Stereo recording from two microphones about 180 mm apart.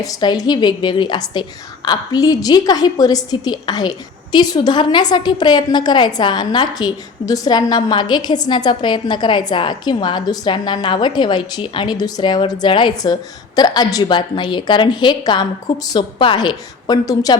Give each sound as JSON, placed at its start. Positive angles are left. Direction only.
{"t": 0.0, "sound": "a woman's voice", "side_deg": 20}